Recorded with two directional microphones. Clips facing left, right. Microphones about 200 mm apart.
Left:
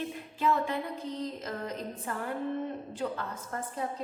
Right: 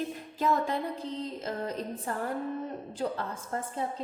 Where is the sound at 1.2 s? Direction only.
30° right (ahead or behind).